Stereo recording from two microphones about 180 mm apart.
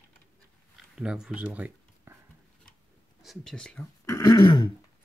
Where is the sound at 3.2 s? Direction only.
Centre (ahead or behind).